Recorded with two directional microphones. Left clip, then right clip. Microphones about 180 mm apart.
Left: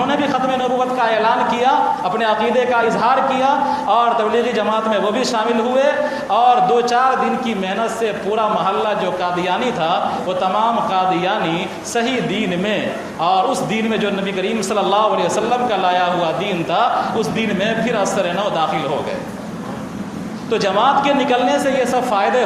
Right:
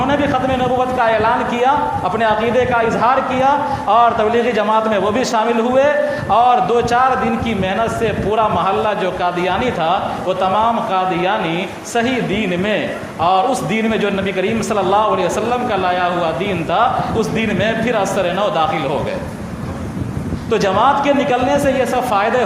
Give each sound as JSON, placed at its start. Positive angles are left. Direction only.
{"t": 0.8, "sound": "a man's voice", "side_deg": -30}
{"t": 13.2, "sound": "a man's voice", "side_deg": -30}
{"t": 20.5, "sound": "a man's voice", "side_deg": -30}